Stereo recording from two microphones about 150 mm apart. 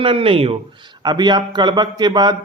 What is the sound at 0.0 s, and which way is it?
Speech, 40° right (ahead or behind).